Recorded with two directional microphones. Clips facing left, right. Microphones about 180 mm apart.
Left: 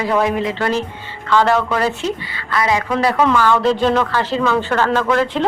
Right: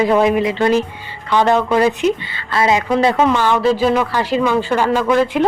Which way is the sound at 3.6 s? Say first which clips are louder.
Right 1 dB; 5° right (ahead or behind).